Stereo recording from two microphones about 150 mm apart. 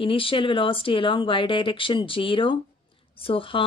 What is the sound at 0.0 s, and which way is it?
Speech, 35° left (ahead or behind).